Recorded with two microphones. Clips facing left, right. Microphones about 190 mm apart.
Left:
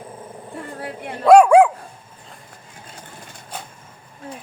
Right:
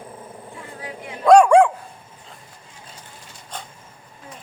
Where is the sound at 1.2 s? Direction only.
5° left (ahead or behind).